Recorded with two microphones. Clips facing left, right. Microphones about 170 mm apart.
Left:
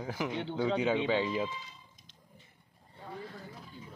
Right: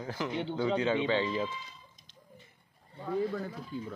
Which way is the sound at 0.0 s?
10° left (ahead or behind).